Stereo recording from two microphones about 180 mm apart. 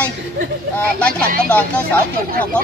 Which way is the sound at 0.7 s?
5° left (ahead or behind).